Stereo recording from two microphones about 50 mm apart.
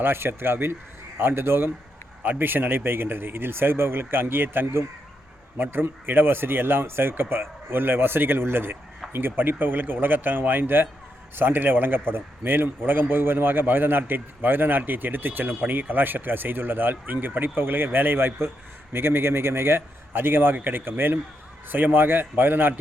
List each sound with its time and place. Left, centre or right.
0.0 s a man's voice: right